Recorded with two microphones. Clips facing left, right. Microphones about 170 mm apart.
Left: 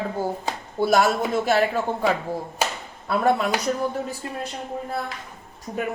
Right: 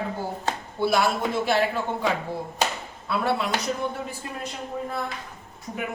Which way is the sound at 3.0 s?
45° left (ahead or behind).